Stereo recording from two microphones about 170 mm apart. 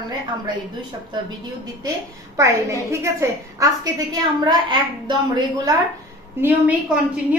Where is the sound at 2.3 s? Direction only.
15° right (ahead or behind).